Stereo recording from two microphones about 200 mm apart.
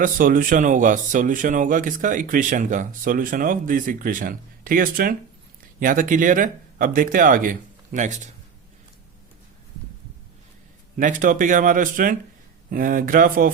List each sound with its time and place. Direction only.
0.0 s speech: 40° right (ahead or behind)
10.9 s speech: 40° right (ahead or behind)